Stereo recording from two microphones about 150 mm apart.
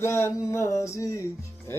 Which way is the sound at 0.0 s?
15° left (ahead or behind).